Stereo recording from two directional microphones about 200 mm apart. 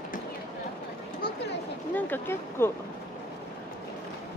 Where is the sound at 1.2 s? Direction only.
50° left (ahead or behind).